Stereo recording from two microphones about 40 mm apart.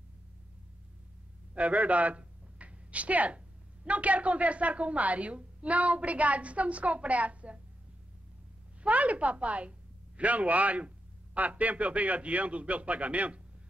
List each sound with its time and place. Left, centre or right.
1.5 s speech: right
8.8 s a woman's voice: right